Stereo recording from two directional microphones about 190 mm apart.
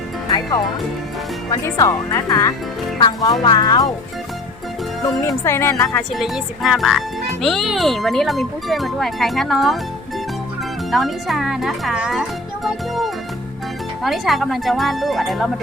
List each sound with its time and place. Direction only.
0.3 s speech: 20° left (ahead or behind)
1.6 s speech: 15° left (ahead or behind)
5.0 s speech: 15° left (ahead or behind); by 9.7 s centre (ahead or behind)
10.9 s speech: centre (ahead or behind)